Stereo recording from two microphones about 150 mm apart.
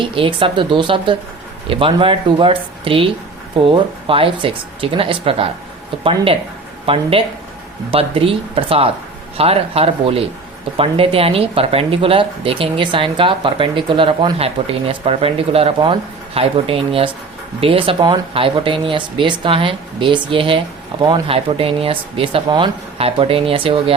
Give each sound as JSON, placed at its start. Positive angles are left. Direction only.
{"t": 0.0, "sound": "speech", "side_deg": -35}